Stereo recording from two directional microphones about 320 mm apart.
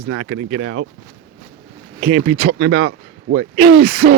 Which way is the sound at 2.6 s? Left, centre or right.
Right.